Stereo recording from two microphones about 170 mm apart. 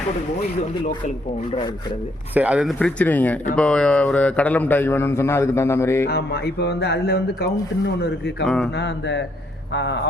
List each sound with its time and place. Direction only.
1.5 s speech: 25° left (ahead or behind)
2.3 s speech: 5° right (ahead or behind)
2.7 s a man's voice: 5° left (ahead or behind)
6.1 s speech: 70° left (ahead or behind)
8.4 s speech: 5° left (ahead or behind)
8.7 s a sound: 90° left